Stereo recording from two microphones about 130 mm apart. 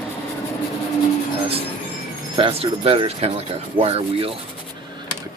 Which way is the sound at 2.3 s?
45° right (ahead or behind).